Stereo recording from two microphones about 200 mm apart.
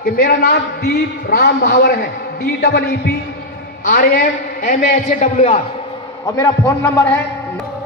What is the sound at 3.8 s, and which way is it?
A man's voice, 45° left (ahead or behind).